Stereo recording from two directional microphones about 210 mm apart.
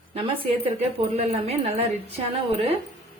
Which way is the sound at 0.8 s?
30° right (ahead or behind).